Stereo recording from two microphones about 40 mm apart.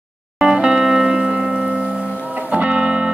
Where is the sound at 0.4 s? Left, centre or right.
Right.